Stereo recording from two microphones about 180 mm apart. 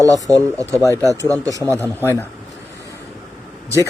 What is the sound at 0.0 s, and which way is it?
Speech, 20° right (ahead or behind).